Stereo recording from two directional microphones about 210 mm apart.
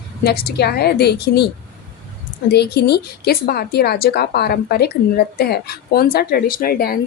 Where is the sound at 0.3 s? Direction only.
50° left (ahead or behind).